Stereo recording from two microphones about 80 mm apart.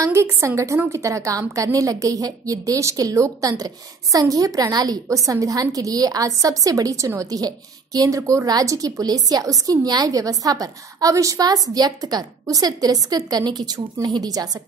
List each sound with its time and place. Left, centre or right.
0.0 s a woman's voice: right
5.0 s a woman's voice: right
8.2 s a woman's voice: right
8.5 s a woman's voice: right
13.7 s a woman's voice: right